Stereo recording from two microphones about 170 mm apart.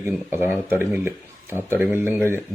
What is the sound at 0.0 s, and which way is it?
Speech, 15° right (ahead or behind).